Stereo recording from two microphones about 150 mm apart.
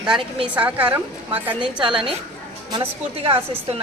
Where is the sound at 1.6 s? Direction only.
35° right (ahead or behind).